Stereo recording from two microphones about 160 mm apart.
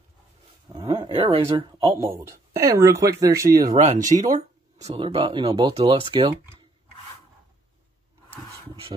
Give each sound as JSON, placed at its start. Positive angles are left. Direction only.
{"t": 0.7, "sound": "dog", "side_deg": -30}
{"t": 1.6, "sound": "speech", "side_deg": -30}
{"t": 2.0, "sound": "speech", "side_deg": -20}
{"t": 3.7, "sound": "speech", "side_deg": -45}
{"t": 4.9, "sound": "speech", "side_deg": -30}
{"t": 5.8, "sound": "speech", "side_deg": -35}